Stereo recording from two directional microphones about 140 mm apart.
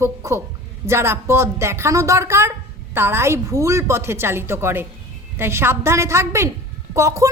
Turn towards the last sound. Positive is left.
turn(degrees=-20)  # may be behind; listen again after turning